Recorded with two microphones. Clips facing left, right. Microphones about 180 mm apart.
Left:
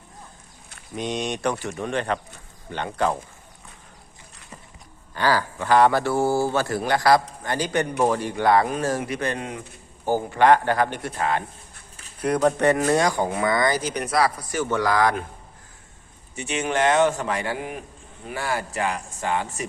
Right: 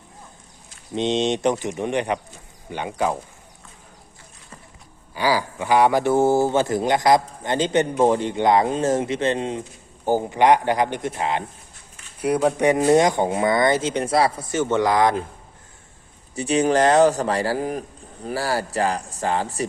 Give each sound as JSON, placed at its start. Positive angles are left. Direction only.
{"t": 0.9, "sound": "a man's voice", "side_deg": -25}
{"t": 5.1, "sound": "a man's voice", "side_deg": -10}
{"t": 12.2, "sound": "a man's voice", "side_deg": -10}
{"t": 16.3, "sound": "speech", "side_deg": -35}